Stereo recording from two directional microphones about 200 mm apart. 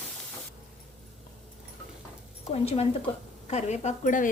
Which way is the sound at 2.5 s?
30° left (ahead or behind).